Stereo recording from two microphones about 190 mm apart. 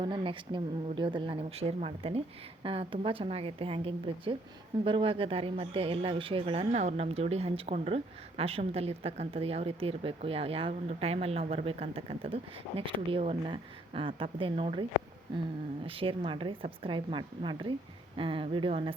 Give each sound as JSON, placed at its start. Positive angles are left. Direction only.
{"t": 0.0, "sound": "a woman's voice", "side_deg": -25}
{"t": 15.9, "sound": "a woman's voice", "side_deg": -30}